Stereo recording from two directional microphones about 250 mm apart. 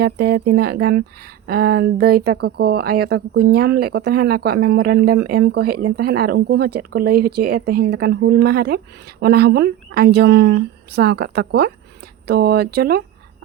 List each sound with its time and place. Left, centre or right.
0.0 s speech: right